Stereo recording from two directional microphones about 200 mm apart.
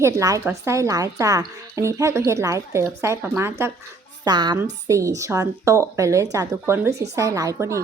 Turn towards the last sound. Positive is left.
turn(degrees=-15)  # may be behind; listen again after turning